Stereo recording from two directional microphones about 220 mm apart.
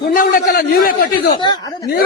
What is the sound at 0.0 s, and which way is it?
Speech, 40° left (ahead or behind).